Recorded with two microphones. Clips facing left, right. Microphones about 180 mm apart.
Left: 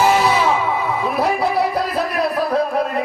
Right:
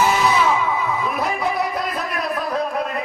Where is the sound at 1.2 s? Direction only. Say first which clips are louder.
Left 7 dB; 30° left (ahead or behind).